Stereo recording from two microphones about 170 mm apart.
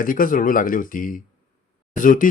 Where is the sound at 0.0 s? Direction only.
55° left (ahead or behind).